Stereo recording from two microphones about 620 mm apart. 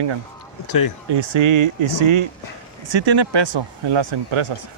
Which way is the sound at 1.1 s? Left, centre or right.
Right.